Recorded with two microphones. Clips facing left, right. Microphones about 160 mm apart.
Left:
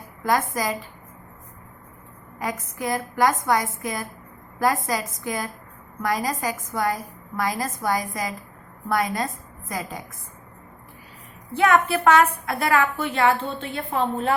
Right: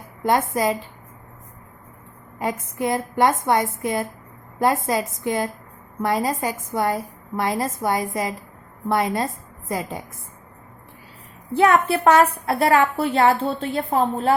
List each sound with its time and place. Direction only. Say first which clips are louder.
0.2 s a woman's voice: right 3 dB; 25° right (ahead or behind)
2.4 s a woman's voice: right 4 dB; 25° right (ahead or behind)
11.5 s a woman's voice: right 2 dB; 35° right (ahead or behind)